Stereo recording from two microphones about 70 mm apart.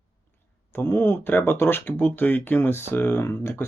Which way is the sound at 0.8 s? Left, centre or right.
Left.